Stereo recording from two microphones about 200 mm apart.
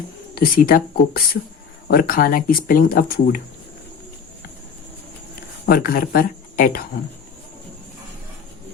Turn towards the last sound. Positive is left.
turn(degrees=45)  # may be behind; listen again after turning